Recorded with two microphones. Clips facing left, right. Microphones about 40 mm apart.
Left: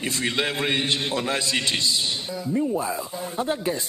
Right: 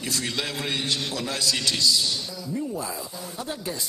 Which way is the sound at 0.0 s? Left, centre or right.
Left.